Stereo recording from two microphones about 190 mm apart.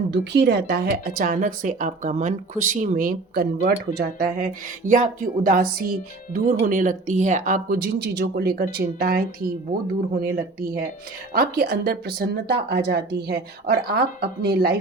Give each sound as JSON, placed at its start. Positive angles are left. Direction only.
{"t": 0.1, "sound": "a woman's voice", "side_deg": -65}